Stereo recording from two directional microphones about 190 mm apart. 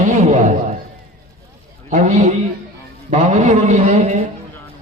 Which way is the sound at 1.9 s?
40° right (ahead or behind).